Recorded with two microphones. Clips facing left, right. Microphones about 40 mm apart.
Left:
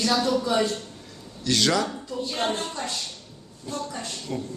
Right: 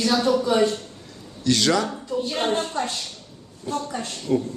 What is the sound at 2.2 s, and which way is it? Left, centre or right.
Speech, right.